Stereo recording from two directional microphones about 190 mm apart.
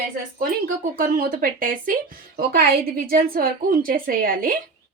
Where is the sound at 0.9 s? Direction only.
50° right (ahead or behind).